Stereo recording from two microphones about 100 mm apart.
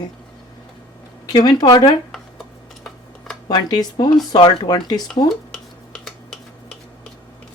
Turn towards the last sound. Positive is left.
turn(degrees=5)  # may be behind; listen again after turning